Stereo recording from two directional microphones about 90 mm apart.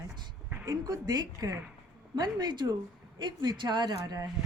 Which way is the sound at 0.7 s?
45° right (ahead or behind).